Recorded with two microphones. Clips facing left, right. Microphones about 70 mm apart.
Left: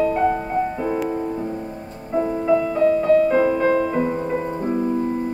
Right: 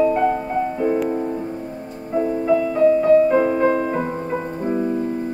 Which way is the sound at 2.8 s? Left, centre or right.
Centre.